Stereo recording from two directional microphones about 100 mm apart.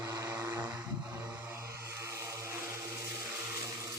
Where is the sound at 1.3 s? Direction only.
20° right (ahead or behind).